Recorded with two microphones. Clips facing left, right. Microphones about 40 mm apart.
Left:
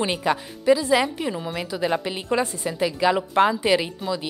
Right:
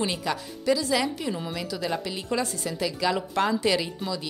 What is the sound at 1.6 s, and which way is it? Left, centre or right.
A woman's voice, left.